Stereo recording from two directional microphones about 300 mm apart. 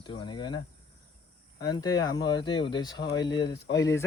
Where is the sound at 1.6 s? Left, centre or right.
Centre.